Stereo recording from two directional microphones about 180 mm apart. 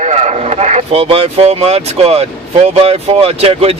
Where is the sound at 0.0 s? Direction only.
40° right (ahead or behind).